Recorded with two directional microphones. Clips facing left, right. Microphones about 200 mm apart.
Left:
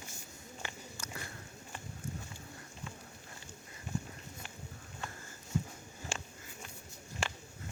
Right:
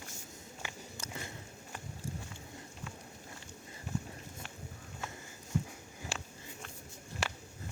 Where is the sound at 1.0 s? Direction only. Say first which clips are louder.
Right 1 dB; 20° right (ahead or behind).